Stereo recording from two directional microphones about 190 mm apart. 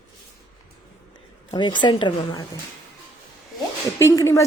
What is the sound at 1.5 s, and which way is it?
Speech, 25° left (ahead or behind).